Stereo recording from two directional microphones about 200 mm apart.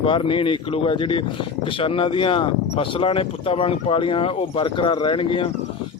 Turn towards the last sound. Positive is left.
turn(degrees=25)  # may be behind; listen again after turning